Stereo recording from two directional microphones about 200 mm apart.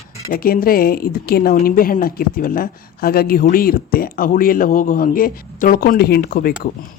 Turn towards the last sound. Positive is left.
turn(degrees=50)  # may be behind; listen again after turning